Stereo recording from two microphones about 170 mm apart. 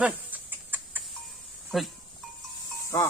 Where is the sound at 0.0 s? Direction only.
10° right (ahead or behind).